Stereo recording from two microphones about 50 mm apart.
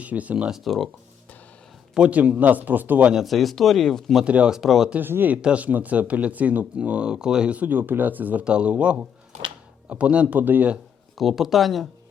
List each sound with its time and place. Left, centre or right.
0.0 s speech: right
0.6 s speech: centre
2.0 s speech: right
3.2 s speech: centre
4.4 s speech: centre
4.9 s speech: right
5.3 s speech: right
7.5 s speech: right
8.4 s speech: right
10.3 s speech: right
11.2 s speech: centre